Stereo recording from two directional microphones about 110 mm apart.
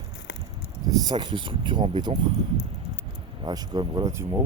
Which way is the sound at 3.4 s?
40° right (ahead or behind).